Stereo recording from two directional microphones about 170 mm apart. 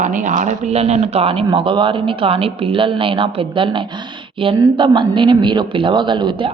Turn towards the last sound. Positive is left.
turn(degrees=-30)  # may be behind; listen again after turning